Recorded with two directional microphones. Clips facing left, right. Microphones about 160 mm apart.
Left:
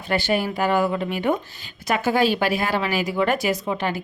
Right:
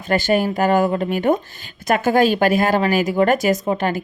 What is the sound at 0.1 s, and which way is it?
A woman's voice, 45° right (ahead or behind).